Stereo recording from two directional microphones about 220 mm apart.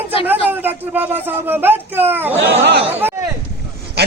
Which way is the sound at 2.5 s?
50° right (ahead or behind).